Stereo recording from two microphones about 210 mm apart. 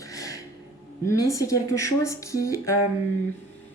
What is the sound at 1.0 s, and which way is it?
Speech, 15° left (ahead or behind).